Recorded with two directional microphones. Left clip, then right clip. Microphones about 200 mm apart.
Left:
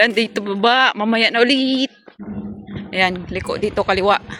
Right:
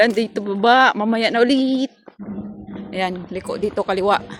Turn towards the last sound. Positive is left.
turn(degrees=0)  # may be behind; listen again after turning